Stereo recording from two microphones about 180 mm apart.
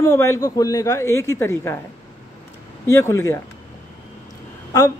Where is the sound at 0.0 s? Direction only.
15° left (ahead or behind).